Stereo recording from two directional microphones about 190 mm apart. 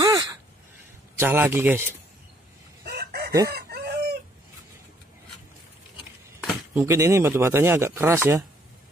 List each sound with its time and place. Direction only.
0.0 s a sound: 20° right (ahead or behind)
1.2 s speech: 10° right (ahead or behind)
2.8 s chicken: 55° right (ahead or behind)
6.4 s speech: 5° right (ahead or behind)